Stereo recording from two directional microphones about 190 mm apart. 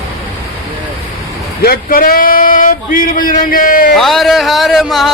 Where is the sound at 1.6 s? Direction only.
50° left (ahead or behind).